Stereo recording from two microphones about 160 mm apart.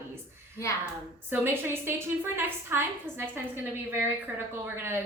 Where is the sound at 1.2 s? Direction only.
15° right (ahead or behind).